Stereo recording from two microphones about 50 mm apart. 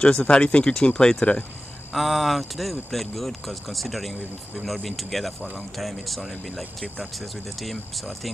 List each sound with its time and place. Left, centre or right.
0.0 s speech: centre
1.9 s speech: centre